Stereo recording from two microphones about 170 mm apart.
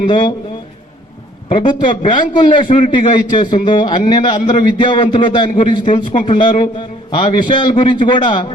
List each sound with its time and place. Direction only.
0.1 s a man's voice: 30° left (ahead or behind)
1.5 s a man's voice: 30° left (ahead or behind)